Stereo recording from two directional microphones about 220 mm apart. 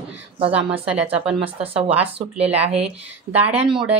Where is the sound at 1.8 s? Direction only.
5° right (ahead or behind).